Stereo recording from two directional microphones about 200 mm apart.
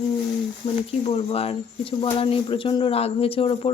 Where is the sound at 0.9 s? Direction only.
30° left (ahead or behind).